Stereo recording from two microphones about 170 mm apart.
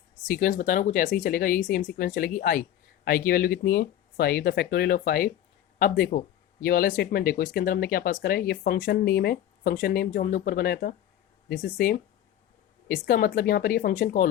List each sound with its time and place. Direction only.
0.3 s speech: 55° left (ahead or behind)